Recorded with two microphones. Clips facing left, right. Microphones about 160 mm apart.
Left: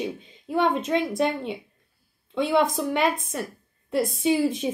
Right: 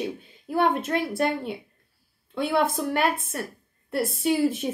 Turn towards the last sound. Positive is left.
turn(degrees=-5)  # may be behind; listen again after turning